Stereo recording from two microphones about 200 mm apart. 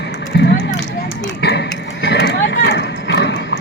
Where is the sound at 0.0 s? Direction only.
55° left (ahead or behind).